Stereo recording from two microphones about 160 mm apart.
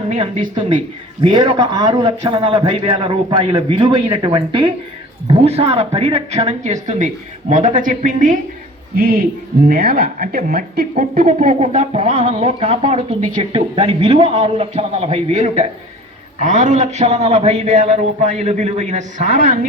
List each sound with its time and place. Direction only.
0.1 s a man's voice: 35° right (ahead or behind); by 8.4 s 55° right (ahead or behind)
9.0 s speech: 65° right (ahead or behind)
11.2 s a man's voice: 50° right (ahead or behind)